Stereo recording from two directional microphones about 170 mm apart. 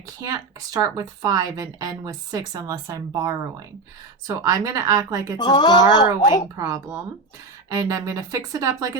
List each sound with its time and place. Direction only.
0.2 s a woman's voice: 20° right (ahead or behind)
5.4 s speech: 25° left (ahead or behind)
7.7 s a woman's voice: 20° right (ahead or behind)